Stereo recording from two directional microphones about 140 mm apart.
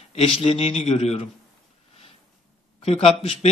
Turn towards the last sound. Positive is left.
turn(degrees=45)  # may be behind; listen again after turning